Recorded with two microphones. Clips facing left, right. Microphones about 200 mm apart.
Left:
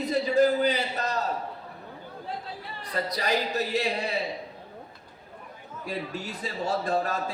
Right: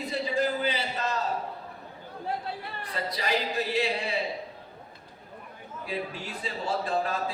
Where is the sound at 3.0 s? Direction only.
40° left (ahead or behind).